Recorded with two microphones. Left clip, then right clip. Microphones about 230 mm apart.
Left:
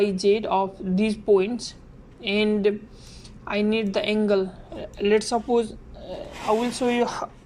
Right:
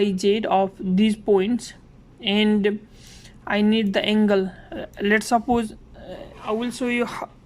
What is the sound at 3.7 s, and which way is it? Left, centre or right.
Speech, right.